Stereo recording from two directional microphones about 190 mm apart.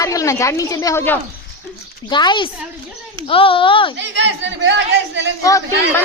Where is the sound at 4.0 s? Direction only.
70° right (ahead or behind).